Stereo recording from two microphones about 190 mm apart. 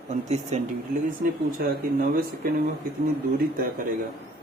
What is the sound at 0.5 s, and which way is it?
Speech, 35° right (ahead or behind).